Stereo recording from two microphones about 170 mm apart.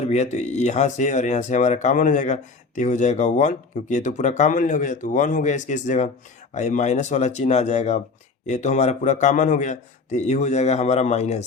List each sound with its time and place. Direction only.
0.0 s speech: 40° left (ahead or behind)